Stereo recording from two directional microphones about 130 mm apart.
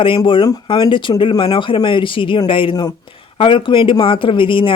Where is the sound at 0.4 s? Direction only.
30° left (ahead or behind).